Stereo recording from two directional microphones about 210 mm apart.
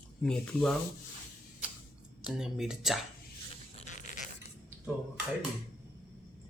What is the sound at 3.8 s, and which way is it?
Zipper, 35° left (ahead or behind).